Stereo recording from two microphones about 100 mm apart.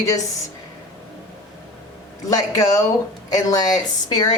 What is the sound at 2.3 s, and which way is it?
Speech, 35° left (ahead or behind).